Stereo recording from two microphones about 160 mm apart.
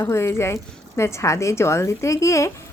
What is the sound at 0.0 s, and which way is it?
A woman's voice, 15° left (ahead or behind).